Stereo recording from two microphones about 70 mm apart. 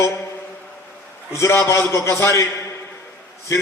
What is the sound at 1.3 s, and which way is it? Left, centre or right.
A man's voice, left.